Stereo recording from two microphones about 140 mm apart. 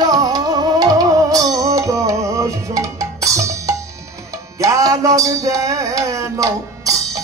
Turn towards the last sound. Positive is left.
turn(degrees=-25)  # may be behind; listen again after turning